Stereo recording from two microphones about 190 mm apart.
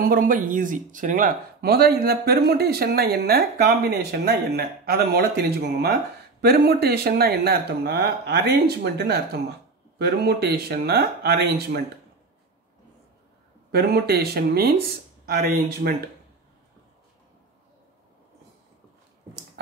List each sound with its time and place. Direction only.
0.0 s speech: 45° right (ahead or behind)
13.7 s speech: 60° right (ahead or behind)